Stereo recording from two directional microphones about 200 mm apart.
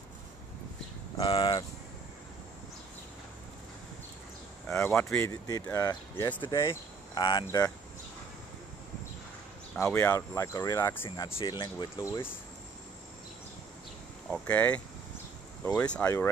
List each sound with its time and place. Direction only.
1.1 s speech: 25° left (ahead or behind)
4.6 s speech: 10° left (ahead or behind)
9.8 s speech: 10° left (ahead or behind)
11.1 s speech: 25° left (ahead or behind)
14.3 s speech: 5° left (ahead or behind)